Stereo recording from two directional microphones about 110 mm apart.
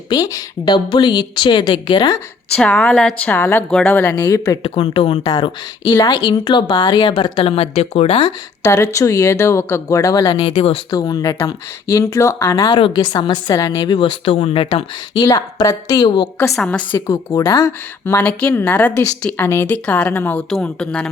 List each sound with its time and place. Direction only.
0.1 s a woman's voice: 35° left (ahead or behind)
2.6 s speech: 15° left (ahead or behind)
4.6 s speech: 50° left (ahead or behind)
5.2 s a woman's voice: 35° left (ahead or behind); by 8.3 s 65° left (ahead or behind)
8.6 s a woman's voice: 25° left (ahead or behind)
10.2 s speech: 60° left (ahead or behind)
10.9 s a woman's voice: 35° left (ahead or behind)
12.7 s a woman's voice: 45° left (ahead or behind); by 14.8 s 65° left (ahead or behind)
15.1 s a woman's voice: 35° left (ahead or behind)
16.0 s a woman's voice: 45° left (ahead or behind)
16.6 s speech: 10° left (ahead or behind)
17.3 s a woman's voice: 35° left (ahead or behind)
18.0 s speech: 15° left (ahead or behind)